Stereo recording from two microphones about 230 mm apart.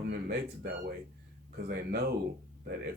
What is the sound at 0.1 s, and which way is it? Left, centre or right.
Speech, right.